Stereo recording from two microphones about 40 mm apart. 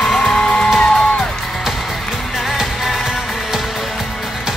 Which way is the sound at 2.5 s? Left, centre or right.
Centre.